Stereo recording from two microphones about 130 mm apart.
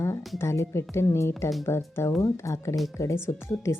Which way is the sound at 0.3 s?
20° left (ahead or behind).